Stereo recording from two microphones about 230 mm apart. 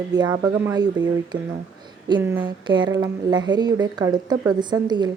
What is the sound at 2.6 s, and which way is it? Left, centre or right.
Speech, centre.